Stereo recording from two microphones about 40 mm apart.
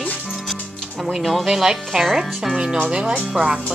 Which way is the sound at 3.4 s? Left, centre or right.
Right.